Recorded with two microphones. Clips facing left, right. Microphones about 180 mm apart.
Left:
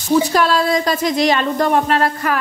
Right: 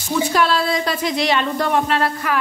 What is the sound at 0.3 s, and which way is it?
A woman's voice, 40° left (ahead or behind).